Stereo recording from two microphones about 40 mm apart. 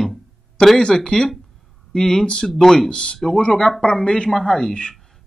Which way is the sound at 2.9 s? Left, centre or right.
Left.